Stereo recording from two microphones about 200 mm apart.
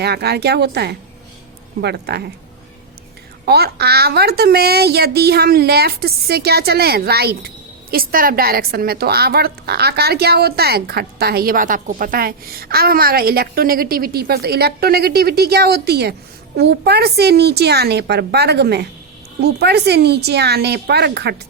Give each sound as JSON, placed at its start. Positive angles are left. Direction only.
{"t": 0.0, "sound": "a woman's voice", "side_deg": -55}
{"t": 3.4, "sound": "a woman's voice", "side_deg": -55}